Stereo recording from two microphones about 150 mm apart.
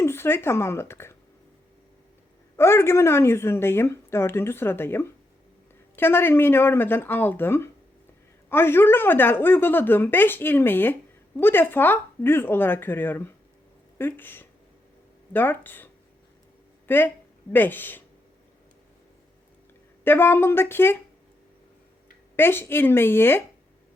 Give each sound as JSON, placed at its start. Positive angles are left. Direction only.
{"t": 0.0, "sound": "a woman's voice", "side_deg": 15}
{"t": 2.6, "sound": "a woman's voice", "side_deg": 15}
{"t": 20.1, "sound": "a woman's voice", "side_deg": 15}
{"t": 22.4, "sound": "a woman's voice", "side_deg": 15}